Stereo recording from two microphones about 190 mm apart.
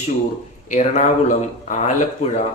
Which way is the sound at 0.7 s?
40° left (ahead or behind).